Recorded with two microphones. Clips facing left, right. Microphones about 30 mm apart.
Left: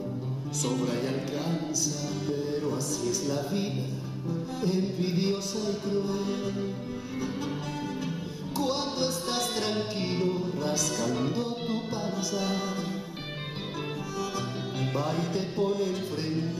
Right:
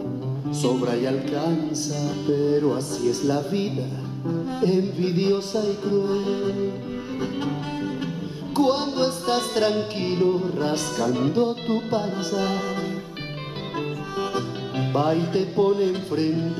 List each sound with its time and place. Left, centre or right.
0.7 s music: right
8.5 s music: right
14.1 s music: right